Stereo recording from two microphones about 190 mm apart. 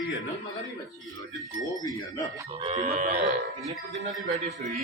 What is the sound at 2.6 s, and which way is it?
Speech, 35° right (ahead or behind).